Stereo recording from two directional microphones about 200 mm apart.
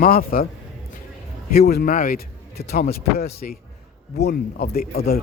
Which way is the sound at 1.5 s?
50° left (ahead or behind).